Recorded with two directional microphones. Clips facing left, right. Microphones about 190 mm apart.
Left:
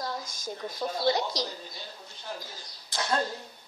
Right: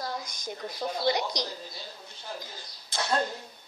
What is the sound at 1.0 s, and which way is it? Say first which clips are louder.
Speech: left 1 dB; 15° right (ahead or behind).